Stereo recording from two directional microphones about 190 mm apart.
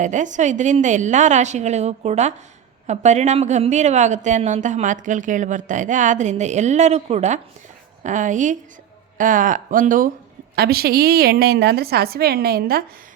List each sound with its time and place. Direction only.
0.0 s a woman's voice: 40° right (ahead or behind)